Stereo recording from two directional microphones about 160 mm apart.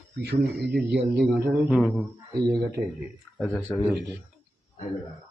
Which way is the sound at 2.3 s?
20° right (ahead or behind).